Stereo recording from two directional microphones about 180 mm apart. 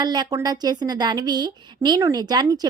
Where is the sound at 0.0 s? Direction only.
25° right (ahead or behind).